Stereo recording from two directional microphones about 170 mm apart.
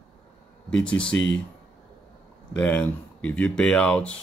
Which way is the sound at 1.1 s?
90° left.